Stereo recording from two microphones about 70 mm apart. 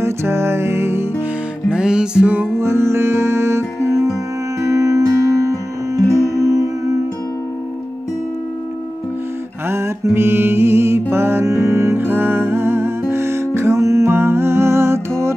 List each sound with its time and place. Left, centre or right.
0.0 s music: right
1.7 s music: centre
2.6 s music: right
10.1 s music: right
14.1 s music: right